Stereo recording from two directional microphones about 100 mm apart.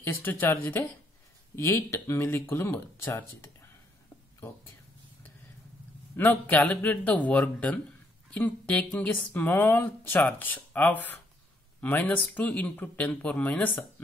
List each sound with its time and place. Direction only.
0.0 s speech: 20° left (ahead or behind)
6.1 s speech: 20° left (ahead or behind)